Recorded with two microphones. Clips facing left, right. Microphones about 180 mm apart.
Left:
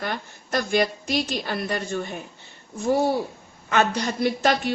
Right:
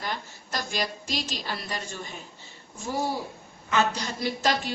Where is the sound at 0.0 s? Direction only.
60° left (ahead or behind).